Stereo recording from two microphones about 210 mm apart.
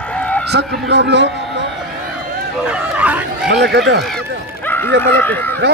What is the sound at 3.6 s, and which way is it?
Speech, 55° right (ahead or behind).